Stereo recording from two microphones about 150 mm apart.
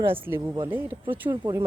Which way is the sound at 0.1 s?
15° right (ahead or behind).